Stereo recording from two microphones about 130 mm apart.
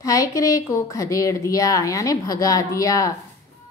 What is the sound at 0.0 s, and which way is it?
A woman's voice, 25° left (ahead or behind).